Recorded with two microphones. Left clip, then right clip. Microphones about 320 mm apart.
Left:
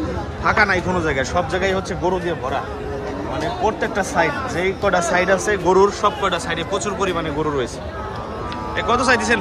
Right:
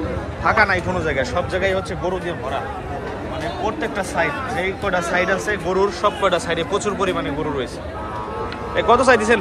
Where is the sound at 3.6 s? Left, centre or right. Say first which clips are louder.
Left 3 dB; centre.